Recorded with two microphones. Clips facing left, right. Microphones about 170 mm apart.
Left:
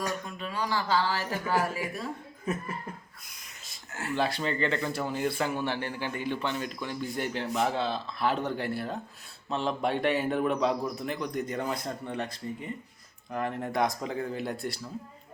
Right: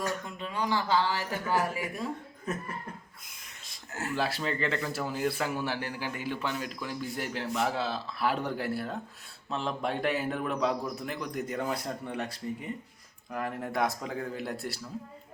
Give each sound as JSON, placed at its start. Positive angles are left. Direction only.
{"t": 0.3, "sound": "speech", "side_deg": -20}
{"t": 4.1, "sound": "a man's voice", "side_deg": -5}